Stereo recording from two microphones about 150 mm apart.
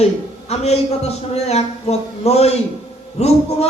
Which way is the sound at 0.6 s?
45° left (ahead or behind).